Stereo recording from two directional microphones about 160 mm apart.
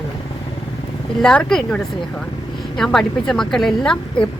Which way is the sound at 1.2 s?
5° left (ahead or behind).